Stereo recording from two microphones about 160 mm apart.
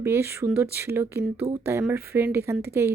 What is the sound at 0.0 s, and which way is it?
Speech, 15° right (ahead or behind).